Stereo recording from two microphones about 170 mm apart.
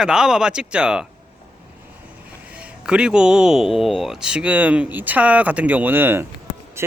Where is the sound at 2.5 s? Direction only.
5° right (ahead or behind).